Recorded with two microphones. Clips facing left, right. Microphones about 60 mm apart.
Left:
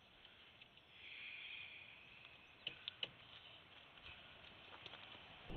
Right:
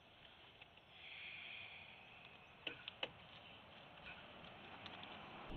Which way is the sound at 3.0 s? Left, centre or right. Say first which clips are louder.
Right 3 dB; right.